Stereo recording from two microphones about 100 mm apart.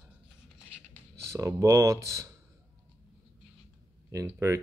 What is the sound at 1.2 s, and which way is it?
Speech, 30° right (ahead or behind).